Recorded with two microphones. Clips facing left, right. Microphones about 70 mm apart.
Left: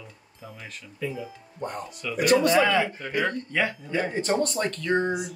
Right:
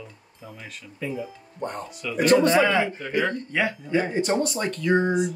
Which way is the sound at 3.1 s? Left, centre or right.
Centre.